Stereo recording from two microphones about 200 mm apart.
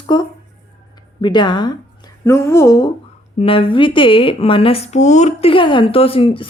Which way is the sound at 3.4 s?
30° left (ahead or behind).